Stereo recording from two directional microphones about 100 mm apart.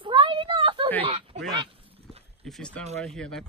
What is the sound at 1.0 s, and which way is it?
Speech, 60° right (ahead or behind).